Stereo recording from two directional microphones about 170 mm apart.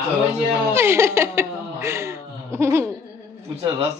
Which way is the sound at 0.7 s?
15° right (ahead or behind).